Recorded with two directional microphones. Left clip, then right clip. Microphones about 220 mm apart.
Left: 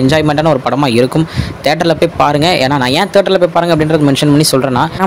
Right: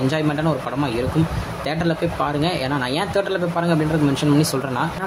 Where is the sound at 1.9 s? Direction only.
40° left (ahead or behind).